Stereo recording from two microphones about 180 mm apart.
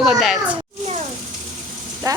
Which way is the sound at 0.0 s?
Centre (ahead or behind).